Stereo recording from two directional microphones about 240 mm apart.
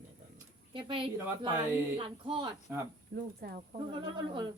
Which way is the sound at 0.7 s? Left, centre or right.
Right.